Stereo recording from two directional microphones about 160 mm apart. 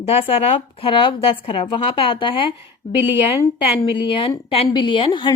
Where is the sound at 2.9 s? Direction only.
10° right (ahead or behind).